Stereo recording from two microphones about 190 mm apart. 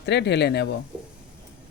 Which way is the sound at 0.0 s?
65° left (ahead or behind).